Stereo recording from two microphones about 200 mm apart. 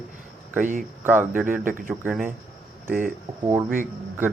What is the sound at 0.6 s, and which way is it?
Speech, 40° right (ahead or behind).